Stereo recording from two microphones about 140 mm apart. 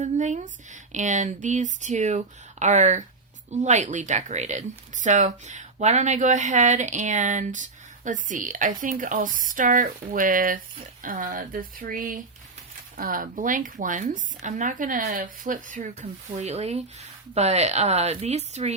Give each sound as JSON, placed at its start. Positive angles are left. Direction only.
{"t": 0.0, "sound": "a woman's voice", "side_deg": -60}
{"t": 16.0, "sound": "speech", "side_deg": -50}